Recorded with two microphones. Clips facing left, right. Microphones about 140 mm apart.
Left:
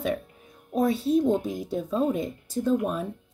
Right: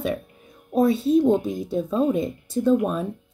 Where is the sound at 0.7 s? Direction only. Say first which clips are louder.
Right 4 dB; 25° right (ahead or behind).